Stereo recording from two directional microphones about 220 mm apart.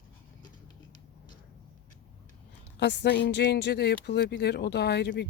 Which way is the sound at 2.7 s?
50° left (ahead or behind).